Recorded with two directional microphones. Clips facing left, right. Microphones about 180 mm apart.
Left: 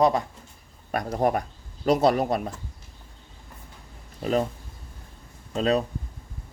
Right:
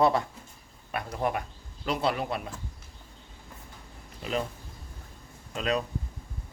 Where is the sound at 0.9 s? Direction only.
40° left (ahead or behind).